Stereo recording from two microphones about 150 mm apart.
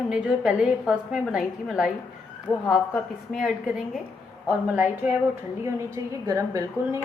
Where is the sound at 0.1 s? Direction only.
5° right (ahead or behind).